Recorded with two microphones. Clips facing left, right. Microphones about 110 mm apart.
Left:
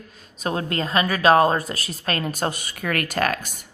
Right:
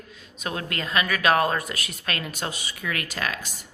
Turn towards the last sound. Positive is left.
turn(degrees=50)  # may be behind; listen again after turning